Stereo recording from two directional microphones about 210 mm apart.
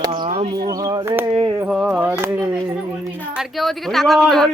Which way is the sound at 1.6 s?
5° right (ahead or behind).